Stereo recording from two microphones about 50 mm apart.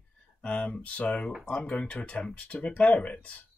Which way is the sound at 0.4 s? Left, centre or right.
Left.